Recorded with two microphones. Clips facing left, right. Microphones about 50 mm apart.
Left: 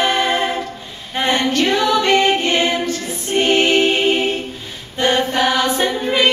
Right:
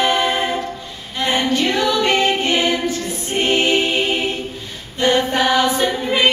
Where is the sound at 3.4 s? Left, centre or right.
Centre.